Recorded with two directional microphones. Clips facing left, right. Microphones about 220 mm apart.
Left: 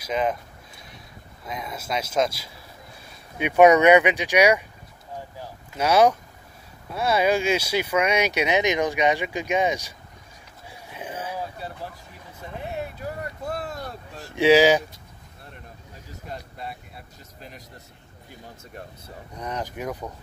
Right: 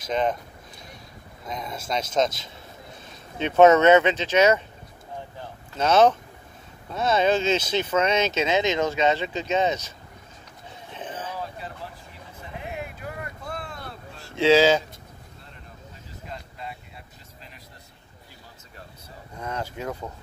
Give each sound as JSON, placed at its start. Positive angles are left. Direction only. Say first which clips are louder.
{"t": 0.0, "sound": "speech", "louder": "even", "side_deg": 5}
{"t": 1.5, "sound": "speech", "louder": "even", "side_deg": 5}
{"t": 10.7, "sound": "a sound", "louder": "left 1 dB", "side_deg": 10}
{"t": 13.0, "sound": "boat", "louder": "left 4 dB", "side_deg": 40}
{"t": 14.2, "sound": "speech", "louder": "left 1 dB", "side_deg": 15}
{"t": 19.3, "sound": "speech", "louder": "left 1 dB", "side_deg": 15}